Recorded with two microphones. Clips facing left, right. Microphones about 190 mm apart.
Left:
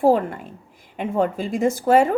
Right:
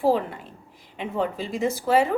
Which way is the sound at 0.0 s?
50° left (ahead or behind).